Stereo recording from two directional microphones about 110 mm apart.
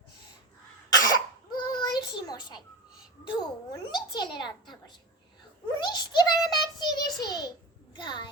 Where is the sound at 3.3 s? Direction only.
40° left (ahead or behind).